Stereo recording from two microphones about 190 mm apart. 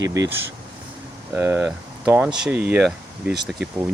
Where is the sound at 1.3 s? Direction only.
10° right (ahead or behind).